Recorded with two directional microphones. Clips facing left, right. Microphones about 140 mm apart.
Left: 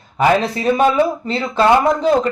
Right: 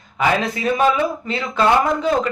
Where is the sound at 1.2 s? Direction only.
35° left (ahead or behind).